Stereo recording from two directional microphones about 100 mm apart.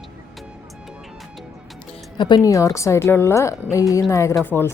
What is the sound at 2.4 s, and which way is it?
Speech, 35° left (ahead or behind).